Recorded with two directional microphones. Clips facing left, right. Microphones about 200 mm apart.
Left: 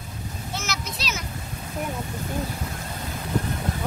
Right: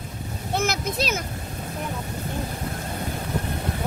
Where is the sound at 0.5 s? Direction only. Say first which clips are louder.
Right 9 dB; 55° right (ahead or behind).